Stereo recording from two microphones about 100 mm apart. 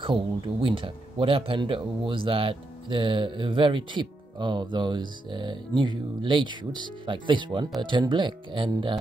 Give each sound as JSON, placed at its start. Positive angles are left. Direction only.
{"t": 0.0, "sound": "speech", "side_deg": -60}